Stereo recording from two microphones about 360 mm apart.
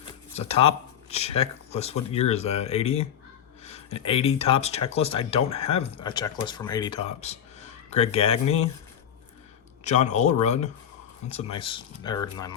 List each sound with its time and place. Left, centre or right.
0.3 s speech: centre
9.8 s speech: centre